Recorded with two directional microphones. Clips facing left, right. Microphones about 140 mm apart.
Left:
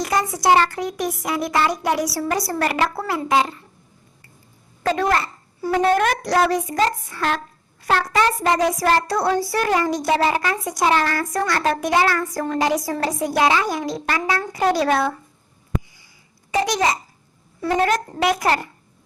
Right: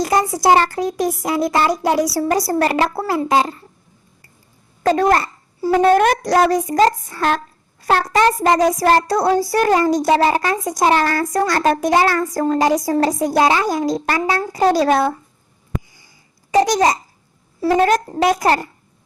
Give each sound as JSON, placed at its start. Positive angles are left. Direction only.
{"t": 0.0, "sound": "speech", "side_deg": -35}
{"t": 4.8, "sound": "speech", "side_deg": -40}
{"t": 5.6, "sound": "speech", "side_deg": -30}
{"t": 6.2, "sound": "speech", "side_deg": -40}
{"t": 16.5, "sound": "a child's voice", "side_deg": -40}